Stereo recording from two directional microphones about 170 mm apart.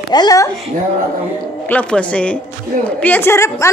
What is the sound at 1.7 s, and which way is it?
A woman's voice, 10° left (ahead or behind).